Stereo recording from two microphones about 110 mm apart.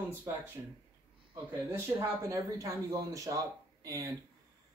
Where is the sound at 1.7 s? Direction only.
25° right (ahead or behind).